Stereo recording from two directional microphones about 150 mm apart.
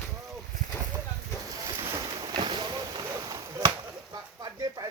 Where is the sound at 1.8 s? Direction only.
20° right (ahead or behind).